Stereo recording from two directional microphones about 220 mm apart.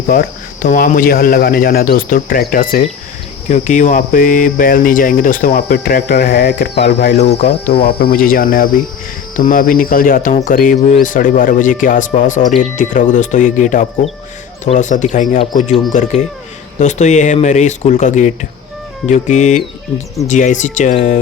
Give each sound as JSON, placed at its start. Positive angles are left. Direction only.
{"t": 0.1, "sound": "speech", "side_deg": 40}
{"t": 7.2, "sound": "speech", "side_deg": 30}
{"t": 7.9, "sound": "speech", "side_deg": 45}